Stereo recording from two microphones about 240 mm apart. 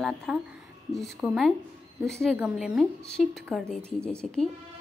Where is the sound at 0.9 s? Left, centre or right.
Centre.